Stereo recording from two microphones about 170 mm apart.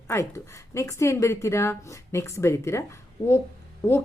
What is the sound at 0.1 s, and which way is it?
Speech, 15° left (ahead or behind).